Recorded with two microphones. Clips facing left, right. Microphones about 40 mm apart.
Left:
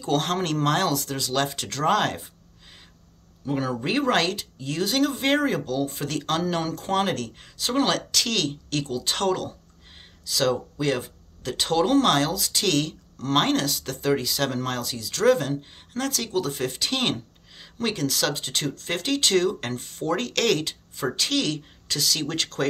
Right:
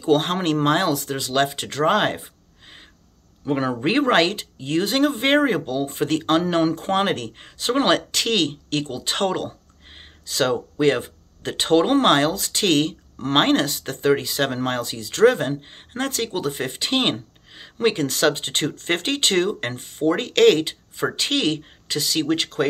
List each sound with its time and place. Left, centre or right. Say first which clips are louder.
0.0 s speech: right 5 dB; right
3.4 s speech: right 4 dB; right